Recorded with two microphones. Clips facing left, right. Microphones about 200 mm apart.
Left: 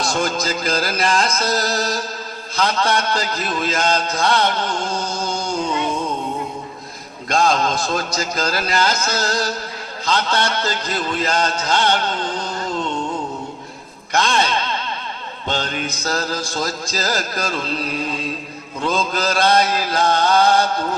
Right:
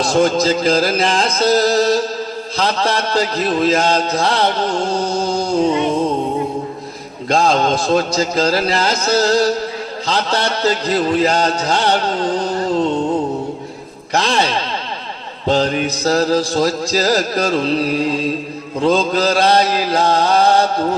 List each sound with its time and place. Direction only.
0.1 s a man's voice: 30° right (ahead or behind)
0.4 s music: 30° right (ahead or behind)
2.6 s a man's voice: 30° right (ahead or behind)
7.3 s a man's voice: 30° right (ahead or behind)
10.1 s a sound: 35° right (ahead or behind)
15.4 s a man's voice: 35° right (ahead or behind)